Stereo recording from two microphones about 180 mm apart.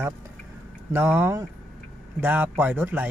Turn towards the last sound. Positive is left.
turn(degrees=-10)  # may be behind; listen again after turning